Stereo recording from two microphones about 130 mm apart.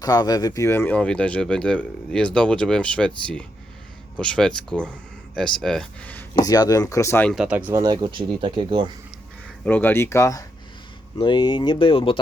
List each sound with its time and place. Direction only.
0.0 s speech: 30° left (ahead or behind); by 3.1 s 10° left (ahead or behind)
4.2 s speech: 5° left (ahead or behind)
6.3 s speech: 30° left (ahead or behind)
7.3 s speech: 5° right (ahead or behind)
7.7 s speech: 30° right (ahead or behind)
9.6 s speech: 15° left (ahead or behind)
11.2 s speech: 35° left (ahead or behind)